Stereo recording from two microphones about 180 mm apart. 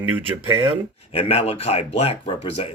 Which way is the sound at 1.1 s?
35° left (ahead or behind).